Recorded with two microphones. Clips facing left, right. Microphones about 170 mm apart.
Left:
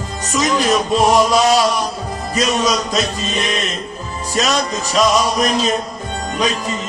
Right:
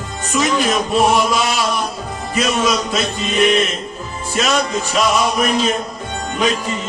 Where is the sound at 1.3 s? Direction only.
40° left (ahead or behind).